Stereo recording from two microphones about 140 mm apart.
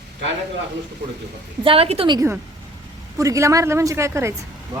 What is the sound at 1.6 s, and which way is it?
Speech, 40° right (ahead or behind).